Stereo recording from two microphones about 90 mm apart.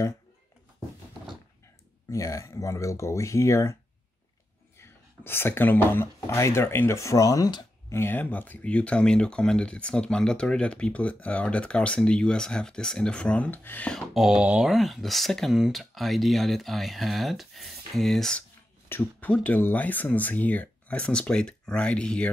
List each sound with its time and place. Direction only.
2.0 s speech: 35° left (ahead or behind)
4.7 s speech: 25° left (ahead or behind)
7.9 s speech: 25° left (ahead or behind)
13.9 s a sound: 5° right (ahead or behind)
14.7 s speech: centre (ahead or behind)
18.9 s speech: 20° left (ahead or behind)